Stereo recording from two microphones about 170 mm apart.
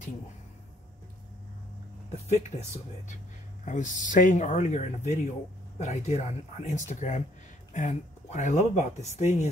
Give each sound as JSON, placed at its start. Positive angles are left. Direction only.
{"t": 2.2, "sound": "speech", "side_deg": 40}
{"t": 3.6, "sound": "speech", "side_deg": 45}